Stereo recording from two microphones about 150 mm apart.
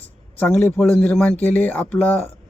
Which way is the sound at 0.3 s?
15° left (ahead or behind).